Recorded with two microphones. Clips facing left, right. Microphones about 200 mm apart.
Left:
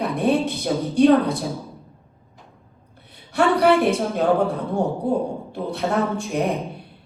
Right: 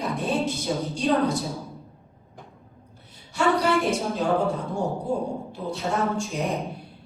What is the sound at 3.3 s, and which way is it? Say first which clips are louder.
A woman's voice: left 5 dB; 60° left (ahead or behind).